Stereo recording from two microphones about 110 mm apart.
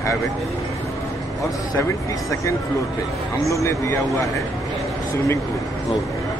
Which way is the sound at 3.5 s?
25° left (ahead or behind).